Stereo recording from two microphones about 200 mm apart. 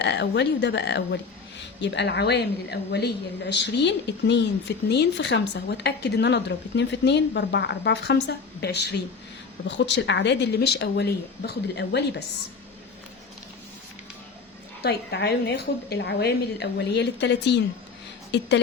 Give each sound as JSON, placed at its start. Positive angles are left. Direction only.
{"t": 0.0, "sound": "speech", "side_deg": 60}
{"t": 14.8, "sound": "speech", "side_deg": 55}